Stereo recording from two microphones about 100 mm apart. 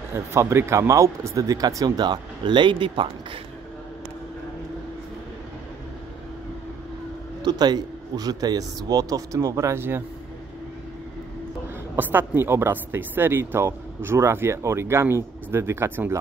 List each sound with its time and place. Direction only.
0.1 s speech: 25° right (ahead or behind); by 3.3 s 55° right (ahead or behind)
7.4 s speech: 45° right (ahead or behind); by 10.0 s 25° right (ahead or behind)
11.9 s a woman's voice: 20° right (ahead or behind)